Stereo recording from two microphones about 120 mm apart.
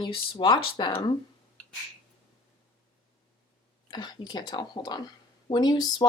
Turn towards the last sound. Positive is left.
turn(degrees=35)  # may be behind; listen again after turning